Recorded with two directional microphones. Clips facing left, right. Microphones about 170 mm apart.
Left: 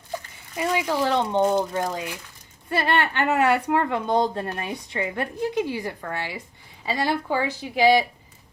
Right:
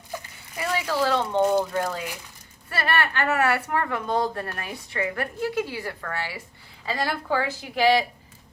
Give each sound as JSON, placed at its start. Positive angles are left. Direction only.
{"t": 0.6, "sound": "speech", "side_deg": 20}
{"t": 1.4, "sound": "speech", "side_deg": 0}
{"t": 1.7, "sound": "speech", "side_deg": 15}